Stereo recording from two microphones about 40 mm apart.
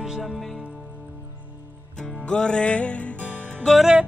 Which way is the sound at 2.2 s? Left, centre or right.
Left.